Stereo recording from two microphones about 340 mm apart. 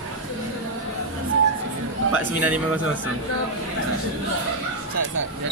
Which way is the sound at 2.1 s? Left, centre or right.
Right.